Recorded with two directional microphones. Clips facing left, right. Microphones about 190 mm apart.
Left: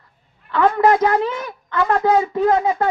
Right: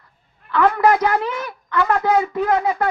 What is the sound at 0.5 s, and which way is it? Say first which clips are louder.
A man's voice: left 1 dB; 30° left (ahead or behind).